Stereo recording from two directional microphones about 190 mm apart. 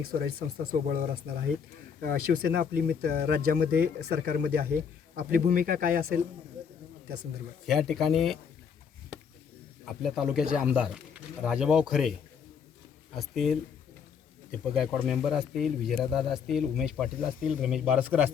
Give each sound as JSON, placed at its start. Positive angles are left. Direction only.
{"t": 0.1, "sound": "speech", "side_deg": -50}
{"t": 7.7, "sound": "speech", "side_deg": 0}
{"t": 10.0, "sound": "speech", "side_deg": 0}
{"t": 13.1, "sound": "speech", "side_deg": 0}
{"t": 14.6, "sound": "speech", "side_deg": -5}